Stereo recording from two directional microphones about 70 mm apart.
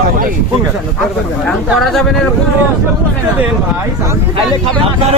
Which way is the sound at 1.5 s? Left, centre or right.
Centre.